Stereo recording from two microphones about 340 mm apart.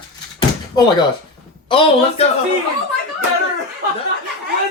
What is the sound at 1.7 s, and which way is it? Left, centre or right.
Speech, centre.